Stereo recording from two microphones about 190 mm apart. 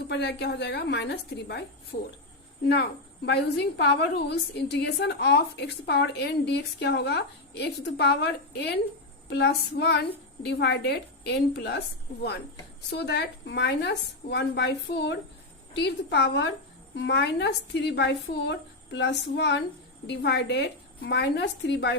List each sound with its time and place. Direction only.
0.1 s a woman's voice: 65° left (ahead or behind)
3.2 s a woman's voice: 60° left (ahead or behind)
12.9 s a woman's voice: 60° left (ahead or behind)